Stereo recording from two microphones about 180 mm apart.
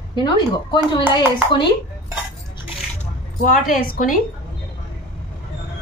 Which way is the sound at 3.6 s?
50° left (ahead or behind).